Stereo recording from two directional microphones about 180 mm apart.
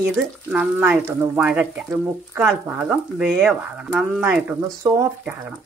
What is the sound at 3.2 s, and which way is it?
Speech, 5° right (ahead or behind).